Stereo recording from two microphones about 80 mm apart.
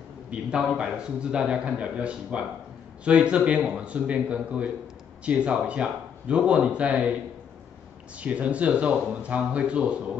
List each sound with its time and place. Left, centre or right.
0.3 s a man's voice: centre
8.2 s a man's voice: centre